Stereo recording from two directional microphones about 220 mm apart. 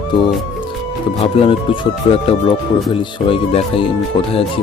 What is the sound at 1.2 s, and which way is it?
Speech, 25° left (ahead or behind).